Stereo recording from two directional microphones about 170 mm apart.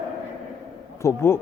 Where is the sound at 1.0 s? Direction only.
15° left (ahead or behind).